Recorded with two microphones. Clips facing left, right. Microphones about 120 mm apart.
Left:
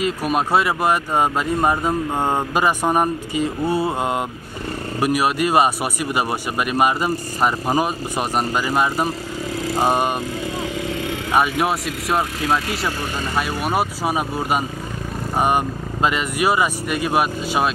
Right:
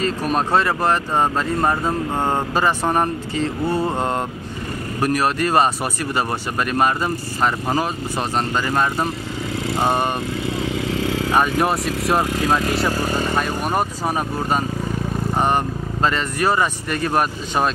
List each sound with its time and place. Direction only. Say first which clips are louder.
0.0 s speech: even; 10° left (ahead or behind)
11.3 s speech: left 1 dB; centre (ahead or behind)